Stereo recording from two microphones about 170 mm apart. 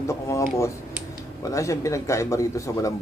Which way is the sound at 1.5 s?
20° left (ahead or behind).